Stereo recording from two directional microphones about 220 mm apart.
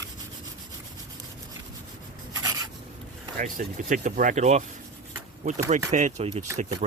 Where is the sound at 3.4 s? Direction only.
35° right (ahead or behind).